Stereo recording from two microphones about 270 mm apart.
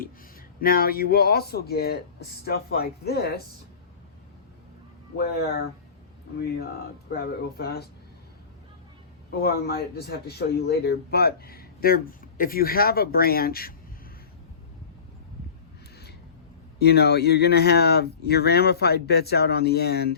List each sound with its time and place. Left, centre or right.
0.6 s speech: left
7.1 s speech: left
9.3 s speech: left
16.8 s speech: left